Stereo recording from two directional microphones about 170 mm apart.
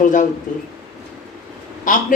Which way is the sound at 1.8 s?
50° left (ahead or behind).